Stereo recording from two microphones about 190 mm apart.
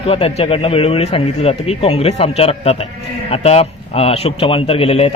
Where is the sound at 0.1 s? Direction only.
30° left (ahead or behind).